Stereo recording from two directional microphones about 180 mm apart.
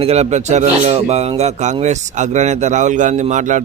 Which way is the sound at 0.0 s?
35° right (ahead or behind).